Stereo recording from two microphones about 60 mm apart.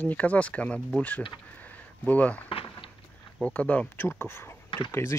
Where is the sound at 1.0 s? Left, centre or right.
Left.